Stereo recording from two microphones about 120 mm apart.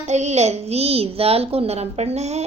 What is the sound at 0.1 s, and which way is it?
A child's voice, 70° right (ahead or behind).